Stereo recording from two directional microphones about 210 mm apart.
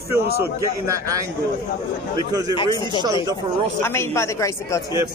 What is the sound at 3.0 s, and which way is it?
Speech, 20° right (ahead or behind).